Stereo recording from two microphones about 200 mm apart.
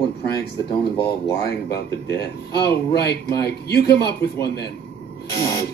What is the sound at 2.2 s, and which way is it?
Speech, 55° left (ahead or behind).